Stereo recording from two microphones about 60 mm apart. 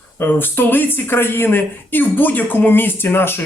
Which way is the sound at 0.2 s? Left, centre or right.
Left.